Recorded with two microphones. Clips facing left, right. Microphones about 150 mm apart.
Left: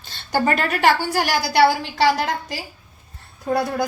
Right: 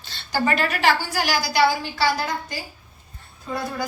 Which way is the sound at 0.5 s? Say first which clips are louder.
Left 1 dB; 55° left (ahead or behind).